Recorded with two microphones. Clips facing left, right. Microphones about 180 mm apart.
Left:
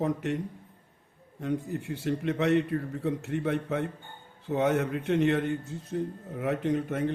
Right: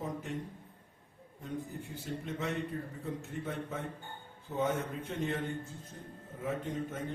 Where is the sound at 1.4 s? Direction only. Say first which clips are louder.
Left 9 dB; 75° left (ahead or behind).